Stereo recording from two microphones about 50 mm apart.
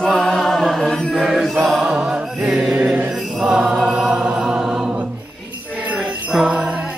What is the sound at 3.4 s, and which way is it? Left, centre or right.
Mantra, centre.